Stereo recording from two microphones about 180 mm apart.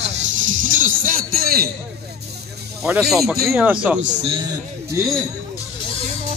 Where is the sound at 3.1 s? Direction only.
Centre (ahead or behind).